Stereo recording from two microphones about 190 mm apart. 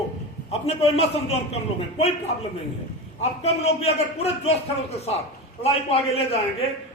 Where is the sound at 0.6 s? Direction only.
30° left (ahead or behind).